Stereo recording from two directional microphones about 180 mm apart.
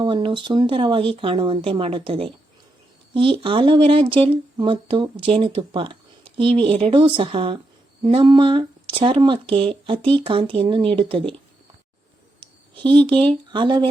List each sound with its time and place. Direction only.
0.0 s speech: 25° right (ahead or behind)
12.4 s a sound: 30° right (ahead or behind)
13.1 s speech: 25° right (ahead or behind)